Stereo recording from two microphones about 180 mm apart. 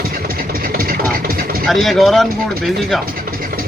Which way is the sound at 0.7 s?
55° right (ahead or behind).